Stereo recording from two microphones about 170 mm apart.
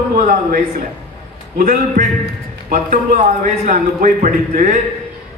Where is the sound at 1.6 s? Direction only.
55° right (ahead or behind).